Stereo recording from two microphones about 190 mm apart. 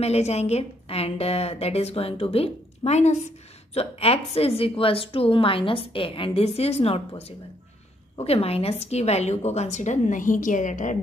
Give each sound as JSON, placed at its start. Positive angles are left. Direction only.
{"t": 0.0, "sound": "a woman's voice", "side_deg": 35}